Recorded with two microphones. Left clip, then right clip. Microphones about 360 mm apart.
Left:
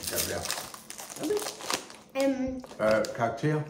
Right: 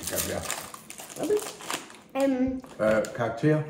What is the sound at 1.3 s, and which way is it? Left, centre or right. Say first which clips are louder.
Crumpling: right 2 dB; left.